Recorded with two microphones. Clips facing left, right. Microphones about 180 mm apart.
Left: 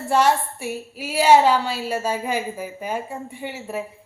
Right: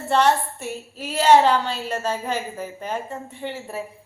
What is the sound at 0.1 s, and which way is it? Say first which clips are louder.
A woman's voice: even; 10° left (ahead or behind).